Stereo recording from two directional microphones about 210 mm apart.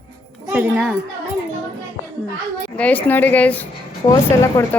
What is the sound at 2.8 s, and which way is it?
A woman's voice, 5° left (ahead or behind).